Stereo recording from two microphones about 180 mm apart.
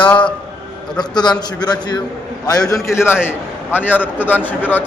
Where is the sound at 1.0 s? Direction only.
25° left (ahead or behind).